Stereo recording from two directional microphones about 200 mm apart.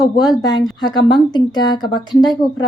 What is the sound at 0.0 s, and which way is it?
A woman's voice, 20° left (ahead or behind).